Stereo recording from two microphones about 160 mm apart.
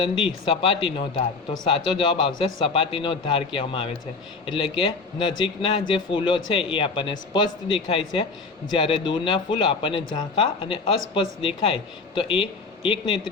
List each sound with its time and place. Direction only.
0.4 s speech: 35° left (ahead or behind)